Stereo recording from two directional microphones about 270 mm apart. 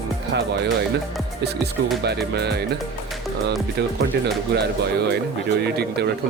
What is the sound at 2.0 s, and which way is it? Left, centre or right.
Speech, right.